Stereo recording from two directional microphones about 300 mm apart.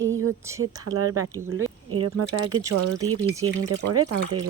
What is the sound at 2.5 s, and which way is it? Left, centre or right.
Speech, centre.